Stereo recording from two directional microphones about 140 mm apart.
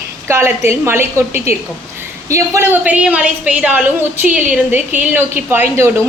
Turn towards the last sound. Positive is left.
turn(degrees=-15)  # may be behind; listen again after turning